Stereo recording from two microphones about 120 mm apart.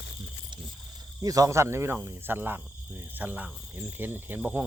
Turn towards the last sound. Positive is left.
turn(degrees=-15)  # may be behind; listen again after turning